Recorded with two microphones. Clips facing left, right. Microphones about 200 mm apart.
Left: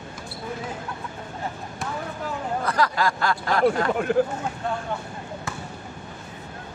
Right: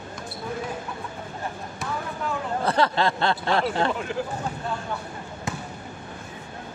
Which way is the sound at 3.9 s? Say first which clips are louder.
Left 5 dB; 55° left (ahead or behind).